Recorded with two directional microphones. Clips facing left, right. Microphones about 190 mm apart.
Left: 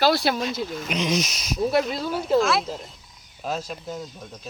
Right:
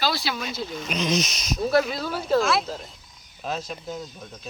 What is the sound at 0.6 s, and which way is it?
Speech, 5° left (ahead or behind).